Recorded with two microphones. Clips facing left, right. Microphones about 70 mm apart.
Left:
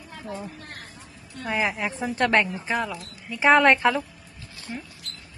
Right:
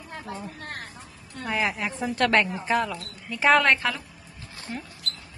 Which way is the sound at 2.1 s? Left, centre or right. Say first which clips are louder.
Even; centre.